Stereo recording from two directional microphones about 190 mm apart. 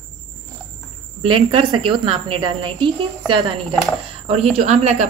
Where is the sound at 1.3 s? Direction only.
25° right (ahead or behind).